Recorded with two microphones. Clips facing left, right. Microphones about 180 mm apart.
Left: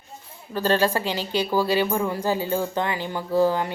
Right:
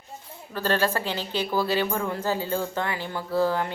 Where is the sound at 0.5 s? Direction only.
15° left (ahead or behind).